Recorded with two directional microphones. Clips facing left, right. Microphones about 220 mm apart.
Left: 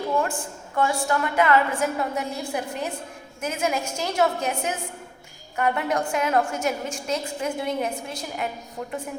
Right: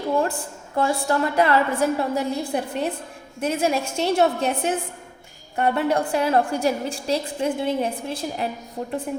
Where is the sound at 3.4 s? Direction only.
35° right (ahead or behind).